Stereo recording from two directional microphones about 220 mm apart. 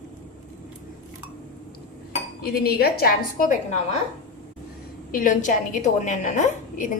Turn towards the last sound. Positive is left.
turn(degrees=35)  # may be behind; listen again after turning